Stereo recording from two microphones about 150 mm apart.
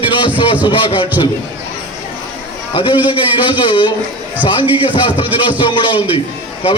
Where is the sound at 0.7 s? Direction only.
35° left (ahead or behind).